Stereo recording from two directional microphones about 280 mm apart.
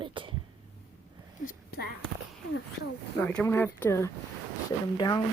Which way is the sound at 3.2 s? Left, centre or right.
Centre.